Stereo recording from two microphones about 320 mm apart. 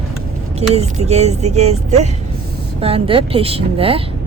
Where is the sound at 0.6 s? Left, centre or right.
Centre.